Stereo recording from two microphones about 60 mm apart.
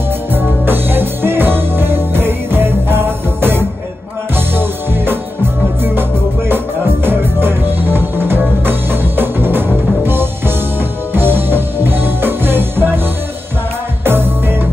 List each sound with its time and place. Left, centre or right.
0.3 s music: right
6.5 s music: right
14.0 s music: right